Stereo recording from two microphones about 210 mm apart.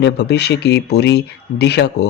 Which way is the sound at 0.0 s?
55° left (ahead or behind).